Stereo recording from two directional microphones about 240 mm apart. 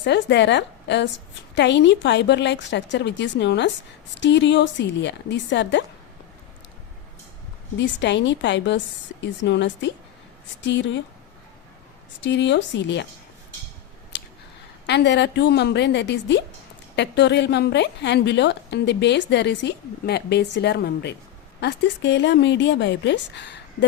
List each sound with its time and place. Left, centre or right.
0.0 s a woman's voice: left
7.8 s a woman's voice: left
12.2 s a woman's voice: left
14.1 s a sound: left
14.8 s a woman's voice: left